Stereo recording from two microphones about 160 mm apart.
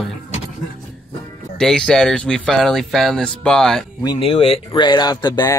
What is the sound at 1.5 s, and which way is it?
Speech, 5° left (ahead or behind).